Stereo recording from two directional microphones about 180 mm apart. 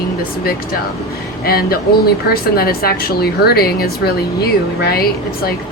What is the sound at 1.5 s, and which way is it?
Speech, 60° left (ahead or behind).